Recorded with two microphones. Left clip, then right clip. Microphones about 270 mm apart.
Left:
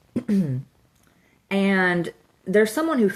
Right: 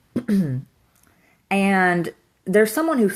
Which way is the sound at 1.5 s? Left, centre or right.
Centre.